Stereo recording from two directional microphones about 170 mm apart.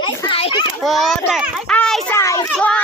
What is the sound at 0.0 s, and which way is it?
Children playing, 30° left (ahead or behind).